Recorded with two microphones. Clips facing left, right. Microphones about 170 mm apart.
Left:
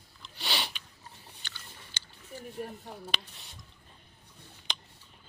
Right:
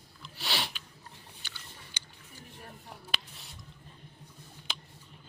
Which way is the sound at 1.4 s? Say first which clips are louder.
Left 1 dB; 10° right (ahead or behind).